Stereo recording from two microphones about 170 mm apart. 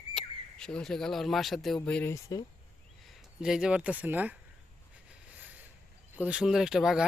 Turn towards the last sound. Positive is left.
turn(degrees=0)  # may be behind; listen again after turning